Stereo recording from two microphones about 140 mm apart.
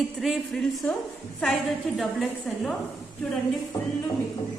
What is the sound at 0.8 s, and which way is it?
Speech, 15° left (ahead or behind).